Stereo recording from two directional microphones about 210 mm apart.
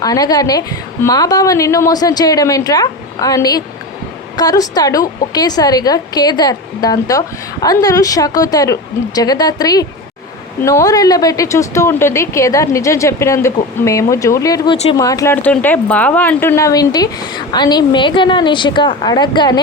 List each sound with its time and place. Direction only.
0.0 s a woman's voice: 15° left (ahead or behind)